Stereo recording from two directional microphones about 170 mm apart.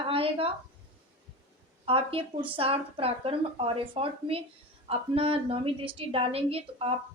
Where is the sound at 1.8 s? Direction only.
30° right (ahead or behind).